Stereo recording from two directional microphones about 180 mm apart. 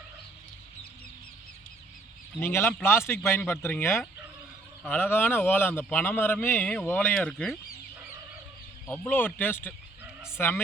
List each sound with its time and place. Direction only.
2.4 s a man's voice: 15° left (ahead or behind)
8.9 s a man's voice: 10° left (ahead or behind)